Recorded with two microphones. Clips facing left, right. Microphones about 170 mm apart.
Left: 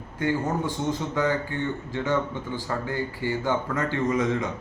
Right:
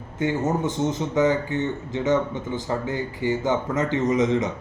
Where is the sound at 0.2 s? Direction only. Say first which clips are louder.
Right 2 dB; 20° right (ahead or behind).